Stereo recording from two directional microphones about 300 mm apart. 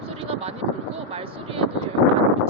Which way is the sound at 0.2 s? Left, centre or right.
Centre.